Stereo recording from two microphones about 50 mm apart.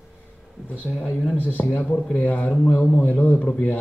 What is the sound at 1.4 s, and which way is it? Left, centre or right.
Speech, left.